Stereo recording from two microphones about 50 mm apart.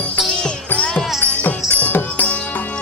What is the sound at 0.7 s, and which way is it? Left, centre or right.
Music, left.